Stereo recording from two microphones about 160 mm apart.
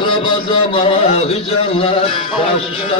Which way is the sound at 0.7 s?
35° left (ahead or behind).